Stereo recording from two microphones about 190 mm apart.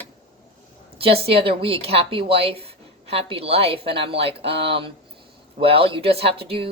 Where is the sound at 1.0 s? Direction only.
30° right (ahead or behind).